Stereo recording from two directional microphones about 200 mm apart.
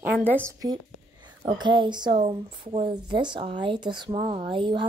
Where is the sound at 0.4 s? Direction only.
15° right (ahead or behind).